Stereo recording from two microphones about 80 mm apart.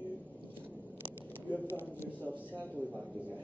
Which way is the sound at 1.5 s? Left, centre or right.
Left.